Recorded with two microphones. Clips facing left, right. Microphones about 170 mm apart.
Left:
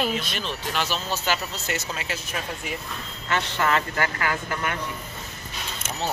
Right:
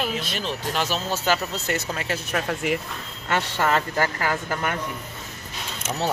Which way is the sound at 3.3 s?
40° right (ahead or behind).